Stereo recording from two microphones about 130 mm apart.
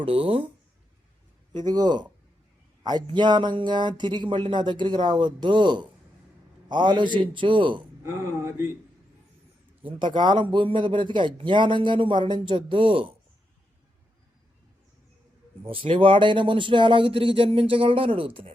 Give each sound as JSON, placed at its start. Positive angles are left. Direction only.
{"t": 0.0, "sound": "speech", "side_deg": -45}
{"t": 1.5, "sound": "speech", "side_deg": -30}
{"t": 9.8, "sound": "speech", "side_deg": -35}
{"t": 15.6, "sound": "speech", "side_deg": -45}